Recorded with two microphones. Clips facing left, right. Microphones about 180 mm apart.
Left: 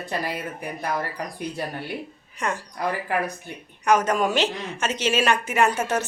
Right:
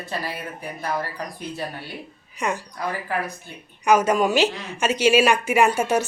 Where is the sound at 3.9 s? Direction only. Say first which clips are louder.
Right 2 dB; 10° right (ahead or behind).